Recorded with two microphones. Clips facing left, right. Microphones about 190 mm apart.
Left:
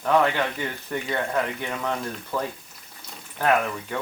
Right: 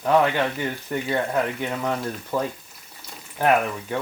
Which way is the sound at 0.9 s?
10° right (ahead or behind).